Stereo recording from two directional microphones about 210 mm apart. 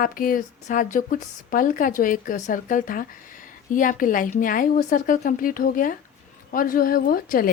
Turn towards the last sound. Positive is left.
turn(degrees=45)  # may be behind; listen again after turning